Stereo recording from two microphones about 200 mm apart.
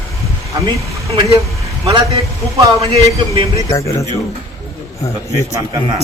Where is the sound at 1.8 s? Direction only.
30° right (ahead or behind).